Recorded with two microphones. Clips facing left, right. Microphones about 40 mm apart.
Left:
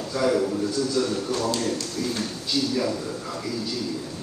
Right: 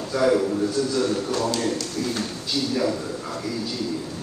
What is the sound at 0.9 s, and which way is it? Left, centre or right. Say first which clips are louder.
Speech: right 2 dB; right.